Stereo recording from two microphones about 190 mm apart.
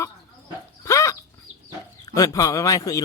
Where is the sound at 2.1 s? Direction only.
20° left (ahead or behind).